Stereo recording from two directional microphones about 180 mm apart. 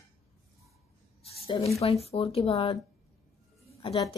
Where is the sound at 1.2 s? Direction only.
35° left (ahead or behind).